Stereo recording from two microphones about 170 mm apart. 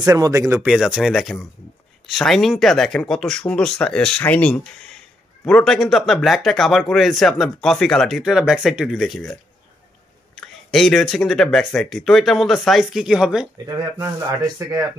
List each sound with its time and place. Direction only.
0.0 s speech: 20° right (ahead or behind)
0.7 s speech: 5° right (ahead or behind)
10.4 s speech: centre (ahead or behind)
13.7 s speech: 20° right (ahead or behind)